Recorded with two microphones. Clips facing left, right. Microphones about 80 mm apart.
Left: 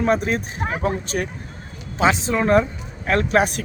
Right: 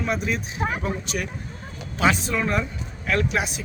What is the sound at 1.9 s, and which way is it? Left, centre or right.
A man's voice, left.